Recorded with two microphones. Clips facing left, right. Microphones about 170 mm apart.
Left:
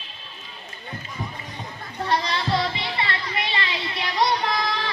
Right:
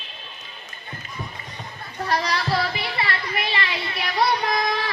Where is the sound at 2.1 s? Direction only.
25° left (ahead or behind).